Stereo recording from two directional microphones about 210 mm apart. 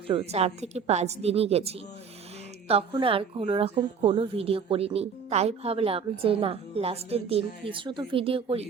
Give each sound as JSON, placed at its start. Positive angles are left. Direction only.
{"t": 0.1, "sound": "a woman's voice", "side_deg": -30}